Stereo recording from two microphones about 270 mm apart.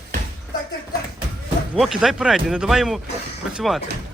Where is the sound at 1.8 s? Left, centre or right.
Centre.